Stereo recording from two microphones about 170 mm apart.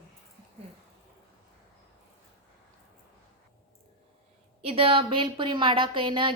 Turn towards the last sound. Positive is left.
turn(degrees=-30)  # may be behind; listen again after turning